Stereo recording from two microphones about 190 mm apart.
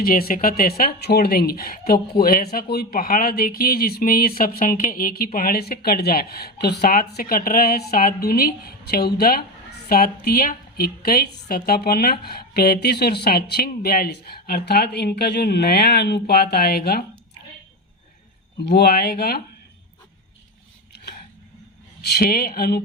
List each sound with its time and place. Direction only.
0.0 s a woman's voice: 50° left (ahead or behind)
18.6 s a woman's voice: 55° left (ahead or behind)
22.1 s a woman's voice: 55° left (ahead or behind)